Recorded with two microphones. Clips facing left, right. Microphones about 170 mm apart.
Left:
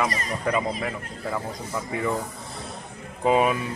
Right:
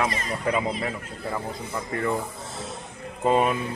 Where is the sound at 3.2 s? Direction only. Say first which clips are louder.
Left 1 dB; 5° left (ahead or behind).